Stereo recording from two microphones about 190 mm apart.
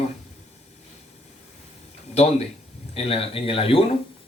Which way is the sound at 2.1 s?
35° left (ahead or behind).